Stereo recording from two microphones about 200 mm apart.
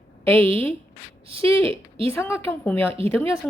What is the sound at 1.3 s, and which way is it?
Speech, 25° right (ahead or behind).